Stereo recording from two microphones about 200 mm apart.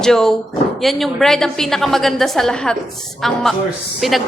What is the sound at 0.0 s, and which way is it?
Speech, centre (ahead or behind).